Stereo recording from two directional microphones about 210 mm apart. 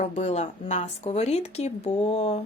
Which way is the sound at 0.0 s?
30° left (ahead or behind).